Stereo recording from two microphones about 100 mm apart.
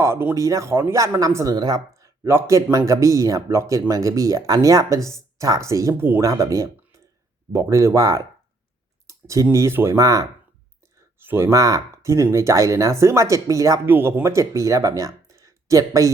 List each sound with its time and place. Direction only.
0.0 s speech: 25° right (ahead or behind)
10.9 s speech: 25° right (ahead or behind)
13.8 s speech: 20° right (ahead or behind)